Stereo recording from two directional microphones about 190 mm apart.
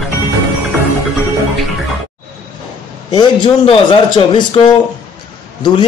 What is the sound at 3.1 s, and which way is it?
A man's voice, 25° left (ahead or behind).